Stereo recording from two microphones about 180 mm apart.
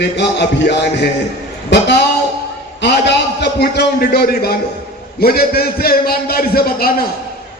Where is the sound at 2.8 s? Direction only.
70° left (ahead or behind).